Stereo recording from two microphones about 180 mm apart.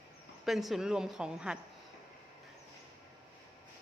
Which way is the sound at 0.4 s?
Centre (ahead or behind).